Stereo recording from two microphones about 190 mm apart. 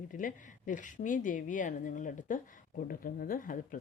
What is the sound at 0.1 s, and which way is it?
Speech, 45° left (ahead or behind).